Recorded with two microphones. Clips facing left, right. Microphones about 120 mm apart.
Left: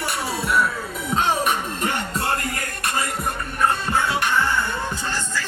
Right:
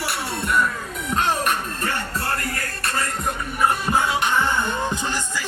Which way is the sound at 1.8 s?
20° left (ahead or behind).